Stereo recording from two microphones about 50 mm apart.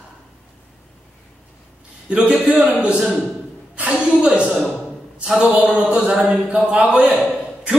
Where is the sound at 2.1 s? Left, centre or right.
Right.